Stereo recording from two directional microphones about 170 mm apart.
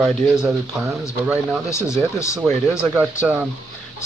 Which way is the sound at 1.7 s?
15° left (ahead or behind).